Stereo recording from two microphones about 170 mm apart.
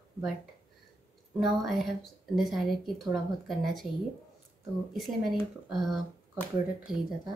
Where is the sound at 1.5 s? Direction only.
Centre (ahead or behind).